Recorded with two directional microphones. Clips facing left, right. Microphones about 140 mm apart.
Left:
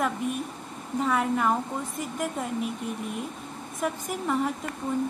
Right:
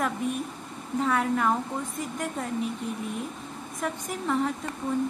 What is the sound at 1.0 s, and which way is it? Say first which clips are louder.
Speech: even; centre (ahead or behind).